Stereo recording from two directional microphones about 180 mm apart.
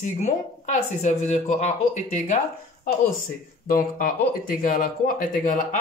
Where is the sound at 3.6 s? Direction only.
50° left (ahead or behind).